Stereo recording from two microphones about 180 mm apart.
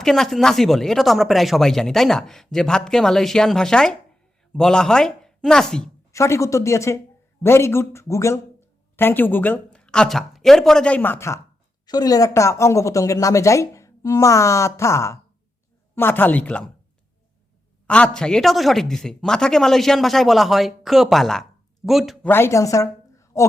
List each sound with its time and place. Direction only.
0.0 s speech: centre (ahead or behind)
6.1 s a woman's voice: 15° left (ahead or behind)
17.8 s speech: 5° left (ahead or behind)
22.3 s speech: 15° left (ahead or behind)